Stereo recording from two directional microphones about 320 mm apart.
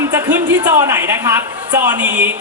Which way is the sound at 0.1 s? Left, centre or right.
Centre.